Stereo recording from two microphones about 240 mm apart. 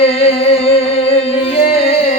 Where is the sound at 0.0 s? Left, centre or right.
Left.